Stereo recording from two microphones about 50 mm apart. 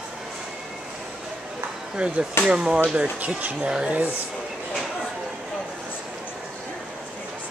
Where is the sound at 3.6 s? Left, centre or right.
Centre.